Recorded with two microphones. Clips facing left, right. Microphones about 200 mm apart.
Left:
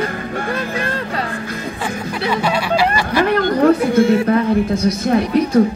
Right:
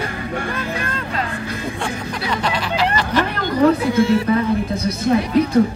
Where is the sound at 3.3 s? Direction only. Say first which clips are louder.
Left 4 dB; 50° left (ahead or behind).